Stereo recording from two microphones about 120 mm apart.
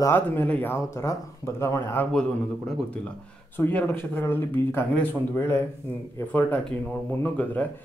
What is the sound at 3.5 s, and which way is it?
Speech, 15° left (ahead or behind).